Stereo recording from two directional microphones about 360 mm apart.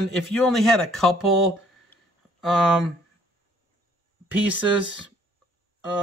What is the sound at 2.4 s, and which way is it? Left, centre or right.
Speech, centre.